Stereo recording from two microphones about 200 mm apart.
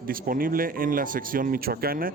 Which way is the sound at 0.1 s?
45° right (ahead or behind).